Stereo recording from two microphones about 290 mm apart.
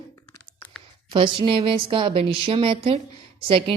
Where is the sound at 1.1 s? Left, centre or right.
Centre.